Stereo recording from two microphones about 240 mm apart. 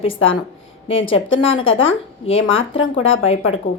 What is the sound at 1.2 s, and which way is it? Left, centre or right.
A woman's voice, left.